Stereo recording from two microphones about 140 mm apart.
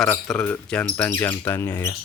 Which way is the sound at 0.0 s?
5° left (ahead or behind).